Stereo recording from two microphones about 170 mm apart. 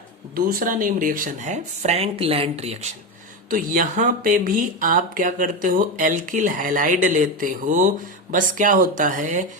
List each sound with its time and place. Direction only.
0.3 s speech: 55° right (ahead or behind); by 2.9 s 35° right (ahead or behind)
3.5 s speech: 55° right (ahead or behind)